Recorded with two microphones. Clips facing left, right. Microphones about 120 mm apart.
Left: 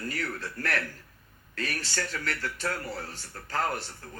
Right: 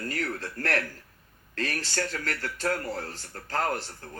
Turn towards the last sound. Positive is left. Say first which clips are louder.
# right 3 dB
turn(degrees=-40)  # may be behind; listen again after turning